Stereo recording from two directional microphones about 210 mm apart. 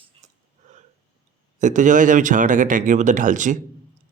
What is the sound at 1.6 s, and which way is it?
Speech, 35° right (ahead or behind).